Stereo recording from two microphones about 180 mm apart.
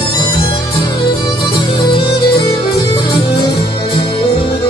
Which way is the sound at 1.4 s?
25° left (ahead or behind).